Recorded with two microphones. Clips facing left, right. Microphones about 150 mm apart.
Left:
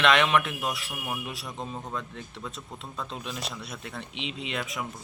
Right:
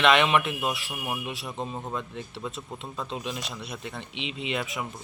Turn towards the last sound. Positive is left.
turn(degrees=0)  # may be behind; listen again after turning